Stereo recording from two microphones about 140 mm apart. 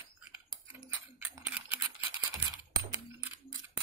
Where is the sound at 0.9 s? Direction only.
10° right (ahead or behind).